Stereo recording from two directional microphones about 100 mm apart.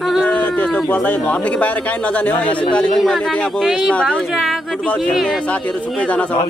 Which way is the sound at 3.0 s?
5° left (ahead or behind).